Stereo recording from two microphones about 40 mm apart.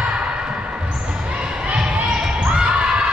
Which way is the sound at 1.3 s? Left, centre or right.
Right.